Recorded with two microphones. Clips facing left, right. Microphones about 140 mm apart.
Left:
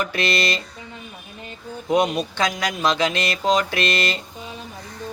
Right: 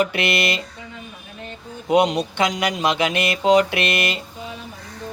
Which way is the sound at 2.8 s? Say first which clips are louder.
Left 1 dB; 20° right (ahead or behind).